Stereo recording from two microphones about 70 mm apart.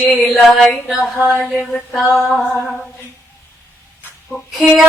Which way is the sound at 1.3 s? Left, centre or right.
Left.